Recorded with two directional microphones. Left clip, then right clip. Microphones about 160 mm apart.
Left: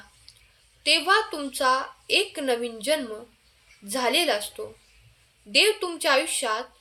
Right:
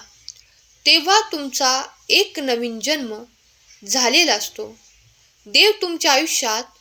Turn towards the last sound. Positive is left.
turn(degrees=-30)  # may be behind; listen again after turning